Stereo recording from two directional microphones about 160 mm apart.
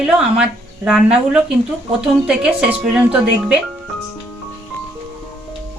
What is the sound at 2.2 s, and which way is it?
Speech, 5° right (ahead or behind).